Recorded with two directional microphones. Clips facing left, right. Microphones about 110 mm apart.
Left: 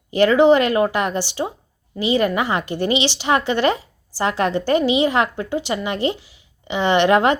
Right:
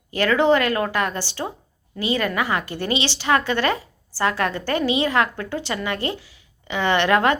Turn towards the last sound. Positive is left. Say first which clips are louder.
# left 3 dB
turn(degrees=20)  # may be behind; listen again after turning